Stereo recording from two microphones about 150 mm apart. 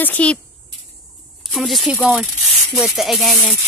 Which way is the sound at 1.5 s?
Centre (ahead or behind).